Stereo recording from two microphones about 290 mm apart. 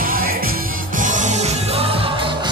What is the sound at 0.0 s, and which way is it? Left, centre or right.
Music, right.